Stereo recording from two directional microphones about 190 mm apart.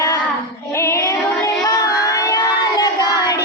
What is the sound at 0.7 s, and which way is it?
Music, 15° left (ahead or behind).